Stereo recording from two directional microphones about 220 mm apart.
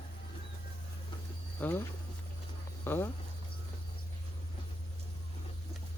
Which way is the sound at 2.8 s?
10° left (ahead or behind).